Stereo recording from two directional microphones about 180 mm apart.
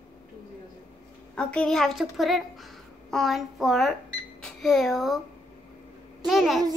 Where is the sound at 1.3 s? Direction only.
5° left (ahead or behind).